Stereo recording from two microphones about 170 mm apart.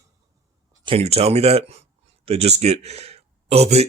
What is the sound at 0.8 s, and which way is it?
Speech, 35° right (ahead or behind).